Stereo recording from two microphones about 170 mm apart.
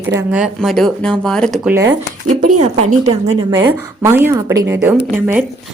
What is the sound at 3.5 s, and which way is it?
A woman's voice, 15° right (ahead or behind).